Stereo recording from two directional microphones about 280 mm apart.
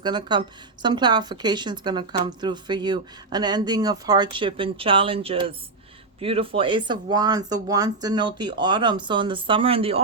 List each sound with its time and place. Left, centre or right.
0.0 s a woman's voice: centre